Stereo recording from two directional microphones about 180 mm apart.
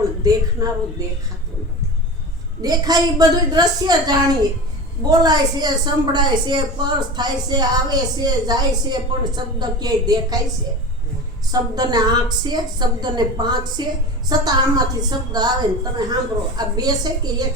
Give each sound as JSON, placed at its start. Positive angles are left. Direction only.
{"t": 0.3, "sound": "a woman's voice", "side_deg": -20}
{"t": 2.6, "sound": "a woman's voice", "side_deg": -20}
{"t": 11.5, "sound": "a woman's voice", "side_deg": -20}